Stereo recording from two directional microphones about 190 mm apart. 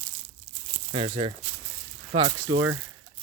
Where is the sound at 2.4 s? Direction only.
15° right (ahead or behind).